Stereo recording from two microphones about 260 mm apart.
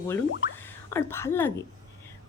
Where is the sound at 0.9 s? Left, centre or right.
Centre.